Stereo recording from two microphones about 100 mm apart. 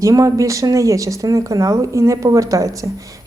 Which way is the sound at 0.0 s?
35° right (ahead or behind).